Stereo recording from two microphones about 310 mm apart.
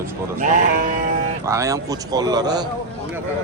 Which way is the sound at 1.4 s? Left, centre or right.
Centre.